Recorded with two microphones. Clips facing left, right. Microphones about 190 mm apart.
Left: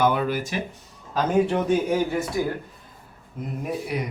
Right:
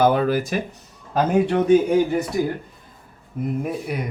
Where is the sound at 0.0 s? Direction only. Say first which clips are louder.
Right 4 dB; 40° right (ahead or behind).